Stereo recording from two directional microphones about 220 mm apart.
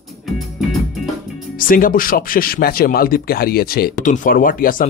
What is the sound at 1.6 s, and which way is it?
Speech, 40° left (ahead or behind).